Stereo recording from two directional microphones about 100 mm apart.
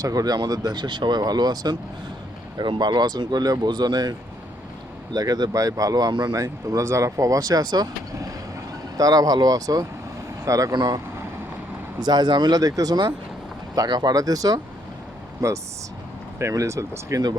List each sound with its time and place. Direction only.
0.0 s speech: 40° right (ahead or behind)
5.1 s speech: 40° right (ahead or behind)